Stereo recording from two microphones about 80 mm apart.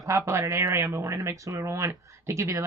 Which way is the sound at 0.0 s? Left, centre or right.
Right.